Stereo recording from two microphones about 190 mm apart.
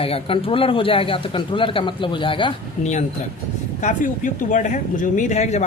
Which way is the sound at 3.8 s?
40° left (ahead or behind).